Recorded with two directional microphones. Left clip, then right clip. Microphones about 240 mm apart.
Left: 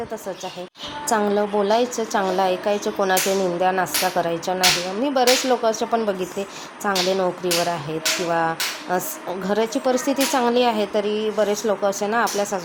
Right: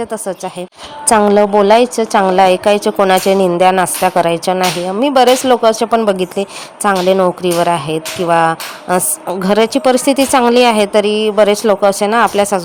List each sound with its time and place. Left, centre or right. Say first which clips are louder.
1.0 s a woman's voice: right 11 dB; right